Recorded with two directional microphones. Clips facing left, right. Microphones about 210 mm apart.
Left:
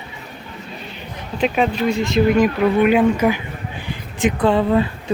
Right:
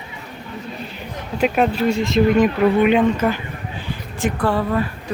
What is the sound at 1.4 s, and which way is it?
Speech, 5° right (ahead or behind).